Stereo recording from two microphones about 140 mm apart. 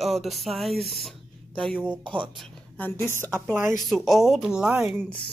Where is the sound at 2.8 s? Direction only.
15° left (ahead or behind).